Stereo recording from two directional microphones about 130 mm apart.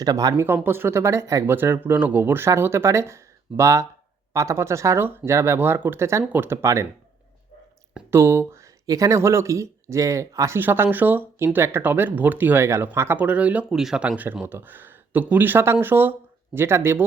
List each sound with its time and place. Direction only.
0.0 s speech: 30° right (ahead or behind)
0.4 s speech: 15° right (ahead or behind)
8.1 s speech: 20° right (ahead or behind)